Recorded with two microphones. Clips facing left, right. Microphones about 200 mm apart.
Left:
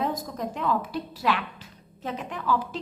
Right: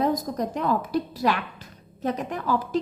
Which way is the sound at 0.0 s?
40° right (ahead or behind).